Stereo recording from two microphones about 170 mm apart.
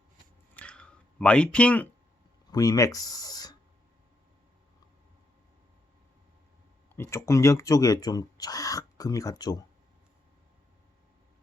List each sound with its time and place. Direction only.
0.5 s a sound: 5° left (ahead or behind)
2.5 s speech: 20° left (ahead or behind)
6.9 s speech: 15° left (ahead or behind)